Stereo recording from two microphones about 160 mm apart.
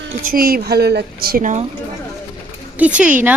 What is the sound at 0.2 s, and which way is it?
A woman's voice, 65° right (ahead or behind).